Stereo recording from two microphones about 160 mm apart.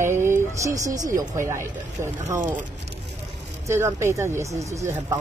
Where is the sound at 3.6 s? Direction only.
15° right (ahead or behind).